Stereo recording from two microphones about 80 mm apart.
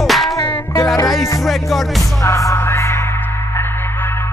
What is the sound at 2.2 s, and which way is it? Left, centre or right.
Music, left.